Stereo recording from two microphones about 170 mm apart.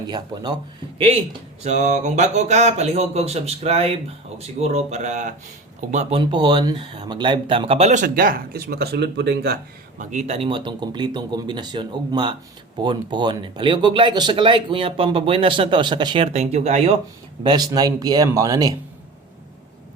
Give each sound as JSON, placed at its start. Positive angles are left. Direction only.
{"t": 0.9, "sound": "speech", "side_deg": -35}
{"t": 10.0, "sound": "speech", "side_deg": -45}
{"t": 17.4, "sound": "speech", "side_deg": -25}